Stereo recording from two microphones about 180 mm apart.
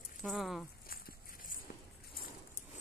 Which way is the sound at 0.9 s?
55° left (ahead or behind).